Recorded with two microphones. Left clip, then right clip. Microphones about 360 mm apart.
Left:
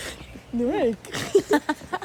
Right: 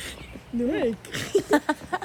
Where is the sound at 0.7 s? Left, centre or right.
Centre.